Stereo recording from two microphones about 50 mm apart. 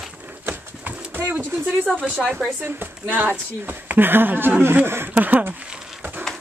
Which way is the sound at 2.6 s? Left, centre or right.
Right.